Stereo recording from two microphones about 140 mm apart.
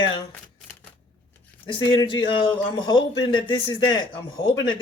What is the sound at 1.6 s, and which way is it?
Speech, 35° left (ahead or behind).